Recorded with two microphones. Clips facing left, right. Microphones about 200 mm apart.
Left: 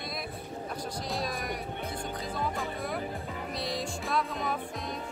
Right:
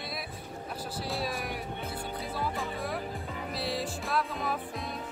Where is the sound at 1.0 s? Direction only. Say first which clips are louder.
Right 1 dB; 5° right (ahead or behind).